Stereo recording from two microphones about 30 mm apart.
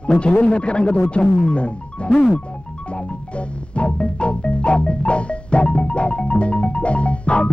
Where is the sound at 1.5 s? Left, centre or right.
Left.